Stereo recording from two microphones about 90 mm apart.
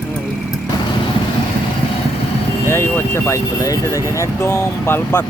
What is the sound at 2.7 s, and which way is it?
Speech, 30° left (ahead or behind).